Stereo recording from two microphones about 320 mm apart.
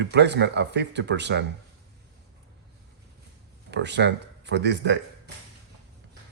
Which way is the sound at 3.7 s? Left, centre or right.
Right.